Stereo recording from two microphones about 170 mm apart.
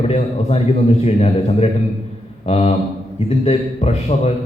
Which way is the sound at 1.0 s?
35° left (ahead or behind).